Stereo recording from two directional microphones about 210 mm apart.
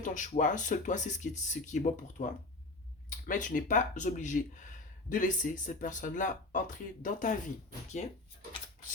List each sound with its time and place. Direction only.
0.0 s speech: 35° left (ahead or behind)